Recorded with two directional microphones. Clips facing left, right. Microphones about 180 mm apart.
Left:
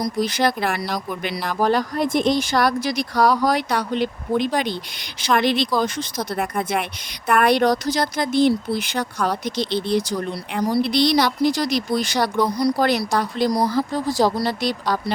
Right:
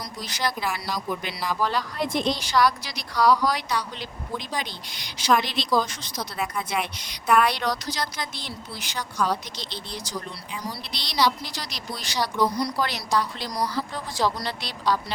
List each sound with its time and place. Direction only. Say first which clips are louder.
0.0 s a woman's voice: left 10 dB; 55° left (ahead or behind)